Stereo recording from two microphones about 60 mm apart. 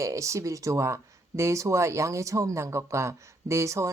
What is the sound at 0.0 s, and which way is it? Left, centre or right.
Speech, right.